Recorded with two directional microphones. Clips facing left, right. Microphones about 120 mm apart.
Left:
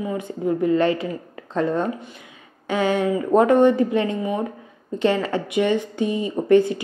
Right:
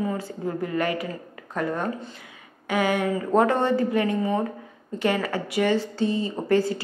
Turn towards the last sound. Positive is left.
turn(degrees=20)  # may be behind; listen again after turning